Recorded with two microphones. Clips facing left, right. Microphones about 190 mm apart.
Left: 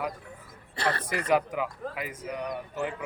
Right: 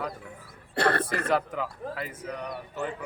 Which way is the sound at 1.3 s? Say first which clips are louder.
Left 4 dB; 10° left (ahead or behind).